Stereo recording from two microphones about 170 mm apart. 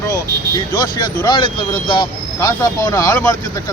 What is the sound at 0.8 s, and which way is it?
Speech, 25° left (ahead or behind).